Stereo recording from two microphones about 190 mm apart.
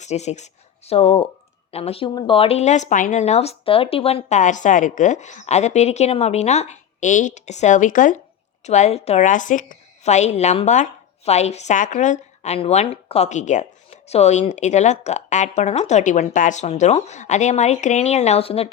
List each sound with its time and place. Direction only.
0.0 s speech: 35° left (ahead or behind)